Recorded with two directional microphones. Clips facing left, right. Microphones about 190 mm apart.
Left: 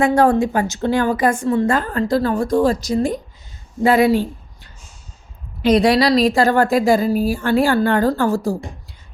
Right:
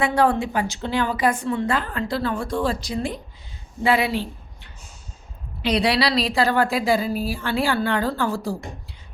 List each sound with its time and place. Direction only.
0.0 s a woman's voice: 45° left (ahead or behind)